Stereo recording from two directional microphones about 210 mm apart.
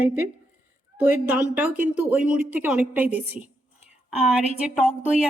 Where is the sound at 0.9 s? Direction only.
5° right (ahead or behind).